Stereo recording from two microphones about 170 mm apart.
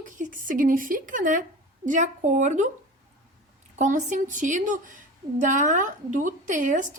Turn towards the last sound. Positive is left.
turn(degrees=-50)  # may be behind; listen again after turning